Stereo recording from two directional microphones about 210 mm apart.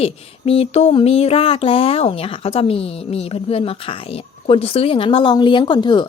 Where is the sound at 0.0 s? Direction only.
30° left (ahead or behind).